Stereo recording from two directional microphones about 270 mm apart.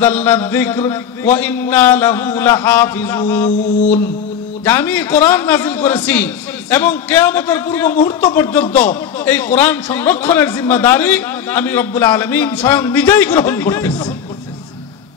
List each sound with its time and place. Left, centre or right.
0.0 s a man's voice: centre
3.4 s mantra: left
4.6 s a man's voice: centre